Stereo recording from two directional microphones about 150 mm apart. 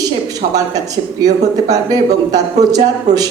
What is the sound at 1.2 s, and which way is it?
Speech, 25° right (ahead or behind).